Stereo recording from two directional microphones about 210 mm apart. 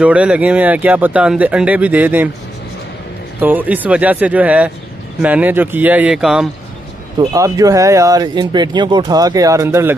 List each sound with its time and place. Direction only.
0.0 s speech: 5° right (ahead or behind)
3.3 s speech: 10° right (ahead or behind)
7.2 s speech: 15° right (ahead or behind)